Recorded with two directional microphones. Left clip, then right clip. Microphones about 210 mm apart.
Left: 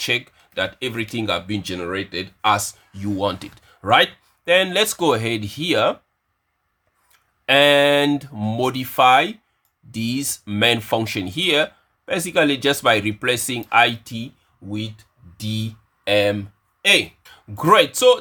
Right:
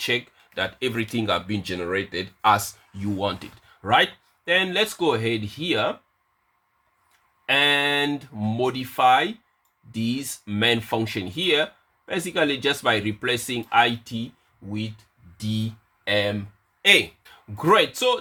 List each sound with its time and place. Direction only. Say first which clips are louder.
0.0 s speech: left 3 dB; 20° left (ahead or behind)
7.4 s speech: left 6 dB; 30° left (ahead or behind)
16.0 s speech: left 5 dB; 30° left (ahead or behind)